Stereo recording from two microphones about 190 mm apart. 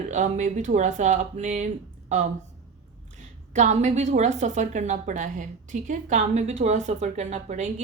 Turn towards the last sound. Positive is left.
turn(degrees=-35)  # may be behind; listen again after turning